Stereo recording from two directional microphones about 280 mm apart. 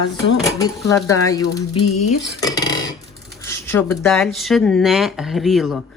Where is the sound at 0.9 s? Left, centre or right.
Centre.